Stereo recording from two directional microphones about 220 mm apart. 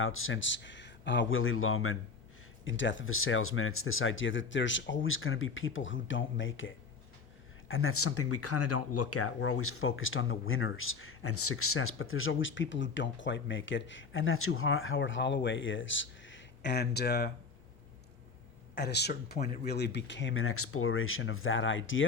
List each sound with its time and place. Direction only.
0.0 s speech: 65° left (ahead or behind)
2.6 s speech: 60° left (ahead or behind)
18.7 s speech: 50° left (ahead or behind)